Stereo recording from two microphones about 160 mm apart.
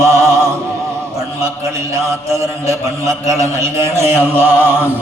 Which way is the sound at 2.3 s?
20° right (ahead or behind).